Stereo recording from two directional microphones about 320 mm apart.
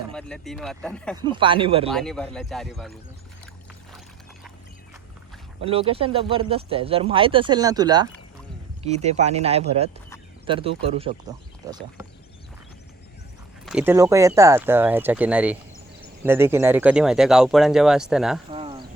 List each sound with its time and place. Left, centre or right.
0.1 s speech: centre
1.1 s speech: centre
1.9 s speech: centre
5.5 s speech: centre
13.7 s speech: centre
18.5 s cricket: centre